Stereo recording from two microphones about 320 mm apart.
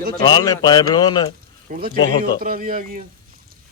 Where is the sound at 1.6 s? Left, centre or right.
Right.